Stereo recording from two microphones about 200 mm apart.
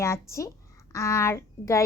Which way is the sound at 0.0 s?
15° left (ahead or behind).